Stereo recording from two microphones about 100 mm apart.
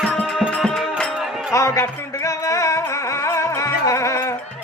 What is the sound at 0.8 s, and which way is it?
Music, 5° left (ahead or behind).